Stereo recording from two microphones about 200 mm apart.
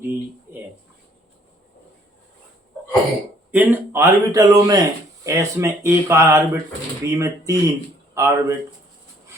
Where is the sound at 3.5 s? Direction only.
10° right (ahead or behind).